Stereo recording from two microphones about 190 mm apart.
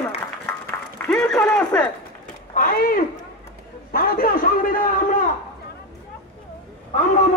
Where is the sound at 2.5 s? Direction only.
45° left (ahead or behind).